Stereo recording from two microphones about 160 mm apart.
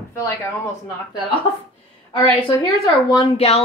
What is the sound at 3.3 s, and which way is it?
Speech, 40° left (ahead or behind).